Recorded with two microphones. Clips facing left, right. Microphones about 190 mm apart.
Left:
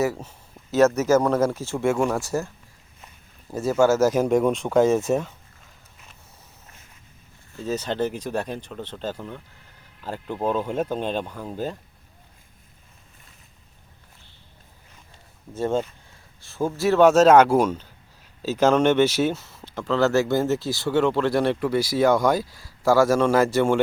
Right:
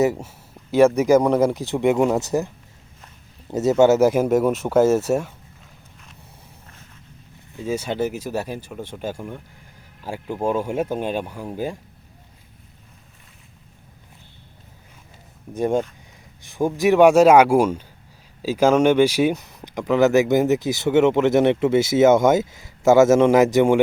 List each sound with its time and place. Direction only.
0.0 s a man's voice: 20° right (ahead or behind)
3.5 s a man's voice: 20° right (ahead or behind)
7.5 s a man's voice: 10° right (ahead or behind)
15.5 s a man's voice: 15° right (ahead or behind)